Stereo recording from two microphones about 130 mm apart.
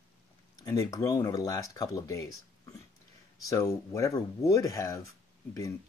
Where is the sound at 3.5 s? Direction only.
25° left (ahead or behind).